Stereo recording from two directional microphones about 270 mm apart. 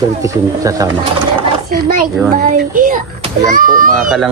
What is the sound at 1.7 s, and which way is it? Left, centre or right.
Speech, right.